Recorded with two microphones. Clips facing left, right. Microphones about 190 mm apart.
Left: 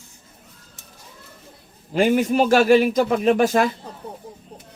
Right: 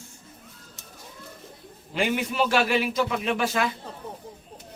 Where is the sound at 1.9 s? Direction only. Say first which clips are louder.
Left 9 dB; 45° left (ahead or behind).